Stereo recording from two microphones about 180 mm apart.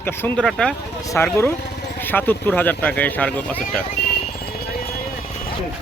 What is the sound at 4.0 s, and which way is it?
Music, 60° left (ahead or behind).